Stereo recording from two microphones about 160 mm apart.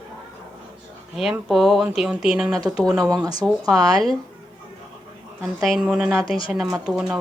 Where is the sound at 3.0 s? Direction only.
20° right (ahead or behind).